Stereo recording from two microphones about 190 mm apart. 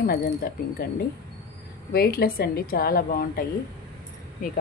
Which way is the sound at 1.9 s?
55° left (ahead or behind).